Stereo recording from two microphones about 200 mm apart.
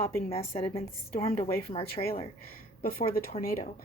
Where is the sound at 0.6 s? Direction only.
30° left (ahead or behind).